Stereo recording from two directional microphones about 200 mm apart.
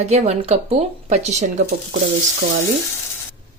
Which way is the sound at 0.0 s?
35° right (ahead or behind).